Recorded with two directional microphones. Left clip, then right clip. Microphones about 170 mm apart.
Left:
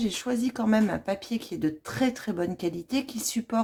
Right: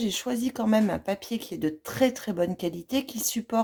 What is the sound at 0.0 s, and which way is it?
Speech, 25° right (ahead or behind).